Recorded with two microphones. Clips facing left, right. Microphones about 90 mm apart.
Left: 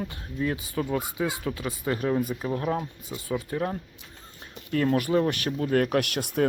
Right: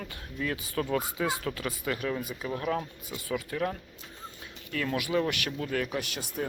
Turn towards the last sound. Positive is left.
turn(degrees=65)  # may be behind; listen again after turning